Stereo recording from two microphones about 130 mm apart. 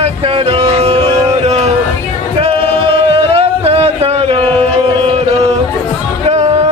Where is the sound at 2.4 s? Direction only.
45° right (ahead or behind).